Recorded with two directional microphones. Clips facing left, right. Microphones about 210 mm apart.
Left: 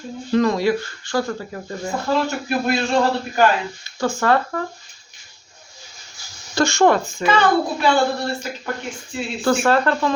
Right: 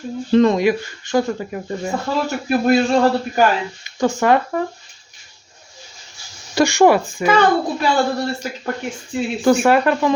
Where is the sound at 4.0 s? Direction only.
20° right (ahead or behind).